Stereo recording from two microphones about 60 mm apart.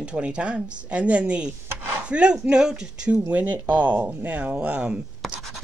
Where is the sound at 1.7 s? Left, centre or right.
Right.